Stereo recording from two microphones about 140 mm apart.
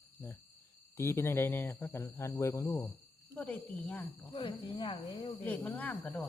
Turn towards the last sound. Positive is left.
turn(degrees=10)  # may be behind; listen again after turning